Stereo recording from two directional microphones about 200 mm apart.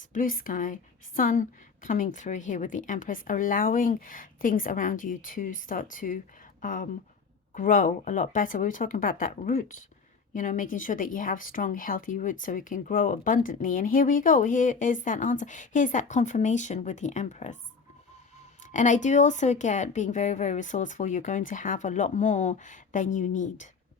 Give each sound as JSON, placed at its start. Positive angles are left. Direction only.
{"t": 0.1, "sound": "speech", "side_deg": 45}
{"t": 18.6, "sound": "speech", "side_deg": 40}